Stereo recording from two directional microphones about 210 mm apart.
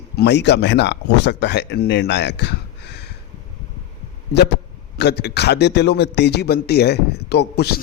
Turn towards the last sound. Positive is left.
turn(degrees=50)  # may be behind; listen again after turning